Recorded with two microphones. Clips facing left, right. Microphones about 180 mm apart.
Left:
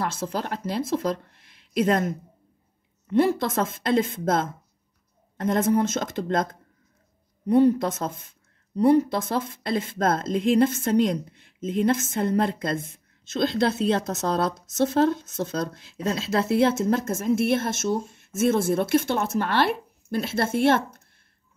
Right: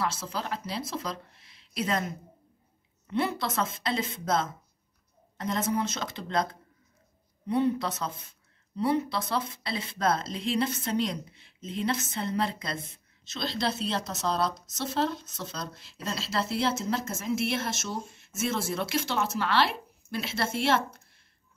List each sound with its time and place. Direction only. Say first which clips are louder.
0.0 s speech: left 4 dB; 50° left (ahead or behind)